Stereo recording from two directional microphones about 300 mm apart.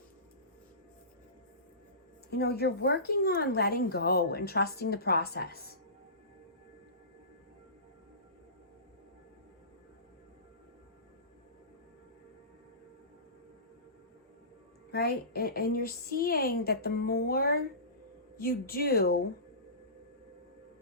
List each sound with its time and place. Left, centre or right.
2.3 s speech: left
14.8 s speech: left